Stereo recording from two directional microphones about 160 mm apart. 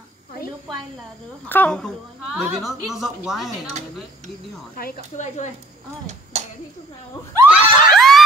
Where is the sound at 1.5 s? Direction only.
10° left (ahead or behind).